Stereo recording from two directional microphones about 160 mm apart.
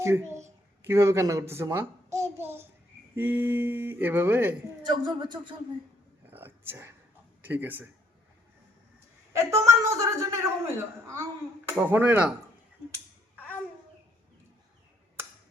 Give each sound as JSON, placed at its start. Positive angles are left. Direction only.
{"t": 0.0, "sound": "a woman's voice", "side_deg": -15}
{"t": 4.9, "sound": "speech", "side_deg": -25}
{"t": 6.3, "sound": "whispering", "side_deg": -15}
{"t": 7.4, "sound": "a man's voice", "side_deg": -10}
{"t": 9.3, "sound": "speech", "side_deg": -20}